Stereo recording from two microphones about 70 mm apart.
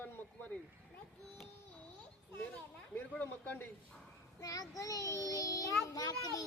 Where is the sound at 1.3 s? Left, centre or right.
Centre.